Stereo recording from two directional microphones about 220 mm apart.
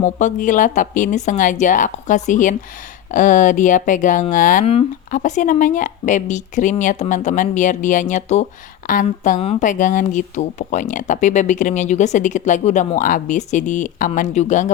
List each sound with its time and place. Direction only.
0.0 s speech: 35° left (ahead or behind)